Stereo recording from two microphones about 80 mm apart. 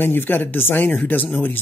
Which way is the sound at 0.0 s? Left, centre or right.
Left.